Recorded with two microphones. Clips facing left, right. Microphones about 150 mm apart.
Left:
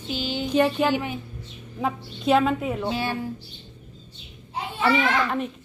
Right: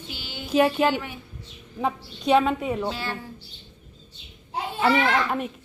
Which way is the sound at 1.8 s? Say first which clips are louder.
Even; centre (ahead or behind).